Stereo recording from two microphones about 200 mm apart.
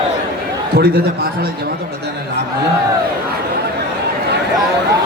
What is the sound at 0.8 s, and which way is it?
Music, 50° right (ahead or behind).